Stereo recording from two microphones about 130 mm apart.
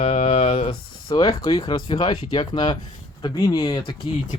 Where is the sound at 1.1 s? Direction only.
35° left (ahead or behind).